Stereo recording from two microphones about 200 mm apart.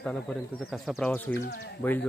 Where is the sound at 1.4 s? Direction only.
60° left (ahead or behind).